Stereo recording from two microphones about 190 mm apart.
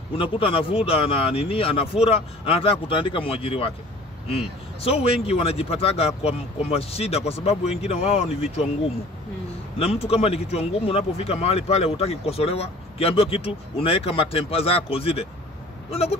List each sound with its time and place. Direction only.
0.2 s speech: 30° left (ahead or behind)
4.8 s speech: 30° left (ahead or behind)
9.8 s speech: 30° left (ahead or behind)